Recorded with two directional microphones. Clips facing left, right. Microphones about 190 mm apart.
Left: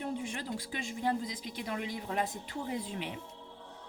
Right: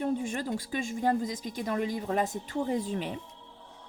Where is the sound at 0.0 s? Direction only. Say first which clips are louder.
Right 7 dB; 45° right (ahead or behind).